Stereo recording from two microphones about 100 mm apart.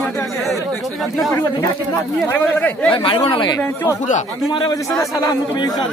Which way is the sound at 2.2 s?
20° left (ahead or behind).